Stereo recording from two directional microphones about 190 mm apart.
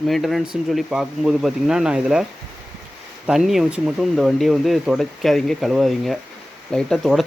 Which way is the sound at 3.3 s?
Centre (ahead or behind).